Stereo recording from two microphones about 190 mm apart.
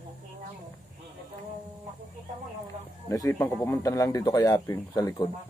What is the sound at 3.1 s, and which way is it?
Speech, 15° left (ahead or behind).